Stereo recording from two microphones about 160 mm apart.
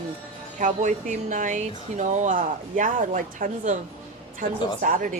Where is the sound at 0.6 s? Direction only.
50° right (ahead or behind).